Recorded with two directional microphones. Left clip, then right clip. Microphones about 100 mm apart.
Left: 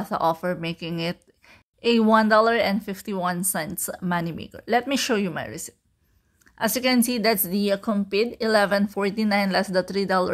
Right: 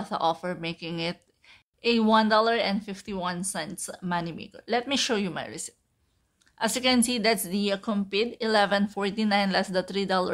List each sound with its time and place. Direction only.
0.0 s a woman's voice: 50° left (ahead or behind)